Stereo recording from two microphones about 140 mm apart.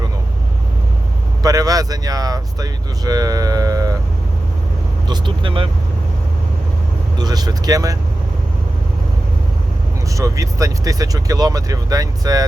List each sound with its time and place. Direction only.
1.4 s speech: 25° right (ahead or behind)
5.0 s speech: 35° right (ahead or behind)
7.2 s speech: 30° right (ahead or behind)
10.2 s speech: 25° right (ahead or behind)